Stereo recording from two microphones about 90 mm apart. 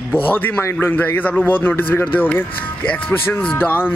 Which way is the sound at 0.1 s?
20° left (ahead or behind).